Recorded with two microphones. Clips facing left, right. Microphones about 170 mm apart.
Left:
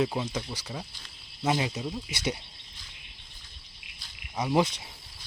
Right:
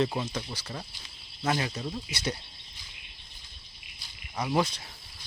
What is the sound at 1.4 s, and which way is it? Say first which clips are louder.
Speech: left 2 dB; 15° left (ahead or behind).